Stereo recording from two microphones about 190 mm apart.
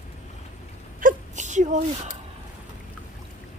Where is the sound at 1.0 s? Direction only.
40° right (ahead or behind).